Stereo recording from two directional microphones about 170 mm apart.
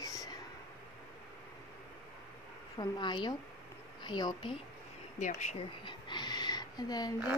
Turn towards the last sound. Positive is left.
turn(degrees=25)  # may be behind; listen again after turning